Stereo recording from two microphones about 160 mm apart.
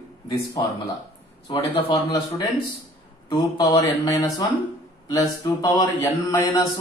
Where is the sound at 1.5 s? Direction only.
25° left (ahead or behind).